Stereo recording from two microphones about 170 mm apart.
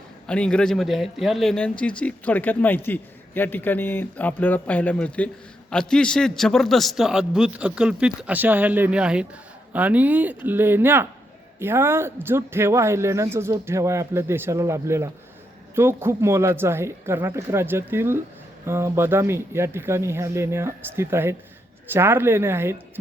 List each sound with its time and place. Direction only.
0.3 s speech: 5° left (ahead or behind); by 22.8 s 15° right (ahead or behind)